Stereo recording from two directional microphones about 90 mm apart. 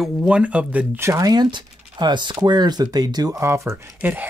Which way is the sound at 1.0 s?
35° right (ahead or behind).